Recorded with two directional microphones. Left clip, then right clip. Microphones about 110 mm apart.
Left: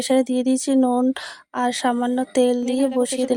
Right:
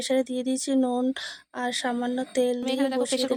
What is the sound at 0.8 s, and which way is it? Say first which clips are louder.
Speech: left 6 dB; 20° left (ahead or behind).